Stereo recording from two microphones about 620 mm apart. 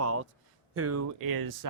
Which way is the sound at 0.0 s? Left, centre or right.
Right.